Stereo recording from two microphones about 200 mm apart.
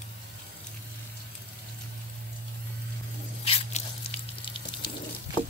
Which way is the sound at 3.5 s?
30° left (ahead or behind).